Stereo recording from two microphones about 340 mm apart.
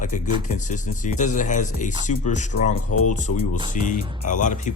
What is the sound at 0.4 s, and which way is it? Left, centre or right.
Speech, left.